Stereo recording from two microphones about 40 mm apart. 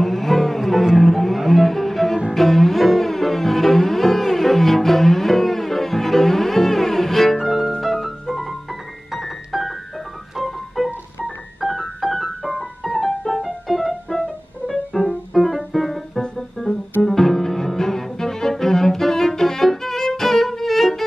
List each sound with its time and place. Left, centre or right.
0.0 s cello: centre
7.8 s music: centre
10.3 s organ: centre
11.6 s music: centre
14.9 s music: left
15.3 s music: centre
17.0 s cello: centre